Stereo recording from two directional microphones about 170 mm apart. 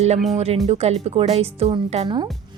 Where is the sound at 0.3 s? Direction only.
35° right (ahead or behind).